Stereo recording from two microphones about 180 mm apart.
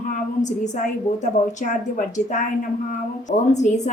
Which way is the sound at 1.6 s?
45° left (ahead or behind).